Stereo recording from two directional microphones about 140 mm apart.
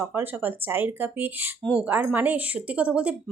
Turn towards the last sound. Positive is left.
turn(degrees=-5)  # may be behind; listen again after turning